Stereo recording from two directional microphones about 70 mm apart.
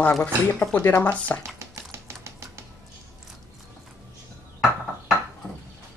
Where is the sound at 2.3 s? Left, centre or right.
Right.